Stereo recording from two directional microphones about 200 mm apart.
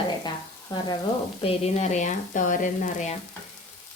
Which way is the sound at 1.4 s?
30° left (ahead or behind).